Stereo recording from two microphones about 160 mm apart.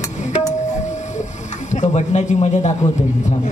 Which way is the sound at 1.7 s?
45° left (ahead or behind).